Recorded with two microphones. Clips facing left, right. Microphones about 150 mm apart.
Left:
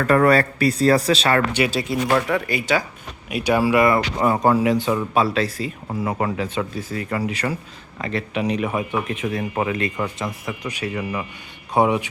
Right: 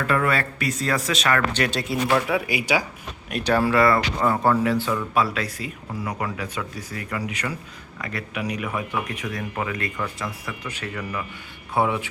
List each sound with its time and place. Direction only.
0.0 s speech: 40° left (ahead or behind)
1.5 s speech: 5° left (ahead or behind)
3.2 s speech: 10° left (ahead or behind)
4.9 s speech: 30° left (ahead or behind)